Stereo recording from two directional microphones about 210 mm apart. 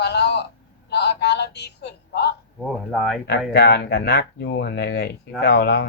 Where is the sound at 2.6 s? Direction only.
Centre (ahead or behind).